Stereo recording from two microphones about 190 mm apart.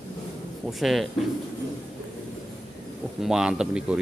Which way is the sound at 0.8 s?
Centre (ahead or behind).